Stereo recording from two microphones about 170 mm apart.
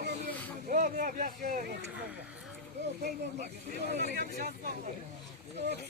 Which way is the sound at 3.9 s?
85° right.